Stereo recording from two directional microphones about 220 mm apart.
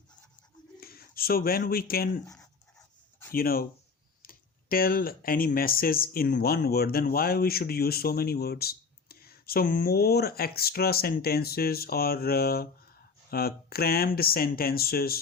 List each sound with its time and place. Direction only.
0.8 s speech: 45° left (ahead or behind)
2.2 s speech: 15° left (ahead or behind)
3.3 s speech: 40° left (ahead or behind)